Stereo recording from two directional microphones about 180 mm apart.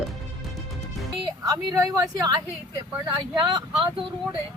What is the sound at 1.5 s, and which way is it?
Speech, 20° right (ahead or behind).